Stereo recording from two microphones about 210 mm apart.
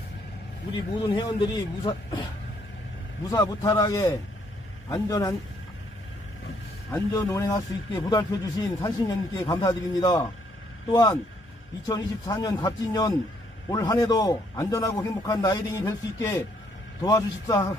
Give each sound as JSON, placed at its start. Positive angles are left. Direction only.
{"t": 0.7, "sound": "speech", "side_deg": 20}
{"t": 3.3, "sound": "a man's voice", "side_deg": 15}
{"t": 6.9, "sound": "a man's voice", "side_deg": 15}